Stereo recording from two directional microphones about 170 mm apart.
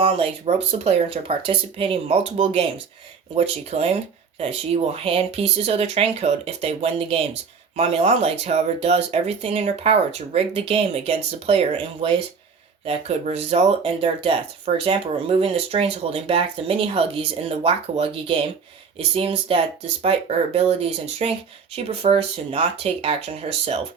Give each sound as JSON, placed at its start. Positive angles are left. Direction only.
{"t": 0.0, "sound": "speech", "side_deg": -35}